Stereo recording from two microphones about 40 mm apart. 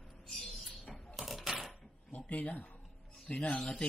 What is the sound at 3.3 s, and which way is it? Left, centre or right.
Music, left.